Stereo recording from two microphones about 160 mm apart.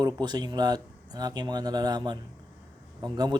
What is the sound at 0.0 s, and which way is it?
Speech, 25° right (ahead or behind).